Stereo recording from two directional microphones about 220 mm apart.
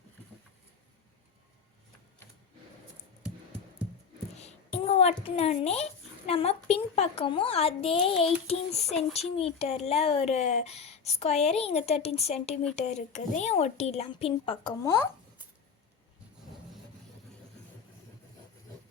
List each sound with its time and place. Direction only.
4.4 s a child's voice: 30° left (ahead or behind)